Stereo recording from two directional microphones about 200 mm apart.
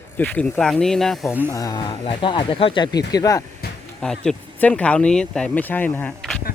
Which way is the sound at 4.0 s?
5° left (ahead or behind).